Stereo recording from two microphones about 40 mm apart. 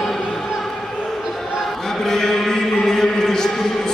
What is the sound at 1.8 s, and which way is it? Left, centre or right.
Chant, centre.